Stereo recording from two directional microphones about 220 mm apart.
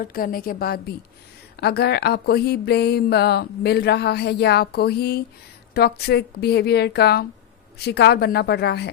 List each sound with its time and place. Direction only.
0.0 s a woman's voice: 40° left (ahead or behind)